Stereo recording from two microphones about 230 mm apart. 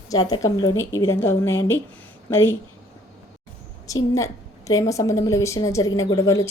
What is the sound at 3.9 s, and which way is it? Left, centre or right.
A woman's voice, centre.